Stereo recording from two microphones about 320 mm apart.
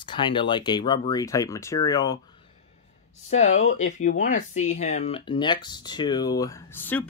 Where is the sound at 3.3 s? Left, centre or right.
Left.